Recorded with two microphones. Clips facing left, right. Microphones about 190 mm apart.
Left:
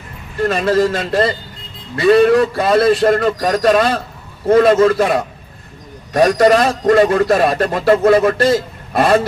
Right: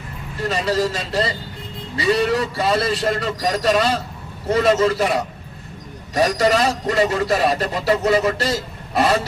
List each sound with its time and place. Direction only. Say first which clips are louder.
0.4 s a man's voice: left 6 dB; 55° left (ahead or behind)